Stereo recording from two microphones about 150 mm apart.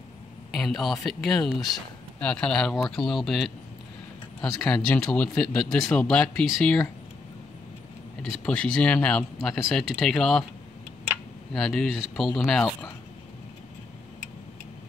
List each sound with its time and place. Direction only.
0.5 s a sound: centre (ahead or behind)
1.0 s speech: centre (ahead or behind)
8.2 s speech: 5° left (ahead or behind)
11.5 s speech: centre (ahead or behind)